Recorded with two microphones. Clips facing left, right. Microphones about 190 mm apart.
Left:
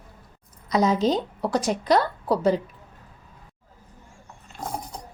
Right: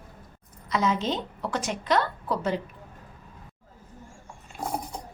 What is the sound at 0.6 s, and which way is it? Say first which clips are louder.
A woman's voice: left 5 dB; 40° left (ahead or behind).